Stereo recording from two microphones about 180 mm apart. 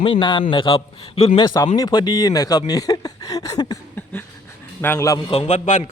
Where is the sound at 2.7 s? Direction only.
20° left (ahead or behind).